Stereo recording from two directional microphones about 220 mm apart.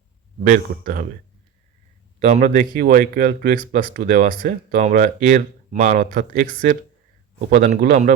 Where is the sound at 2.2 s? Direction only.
35° right (ahead or behind).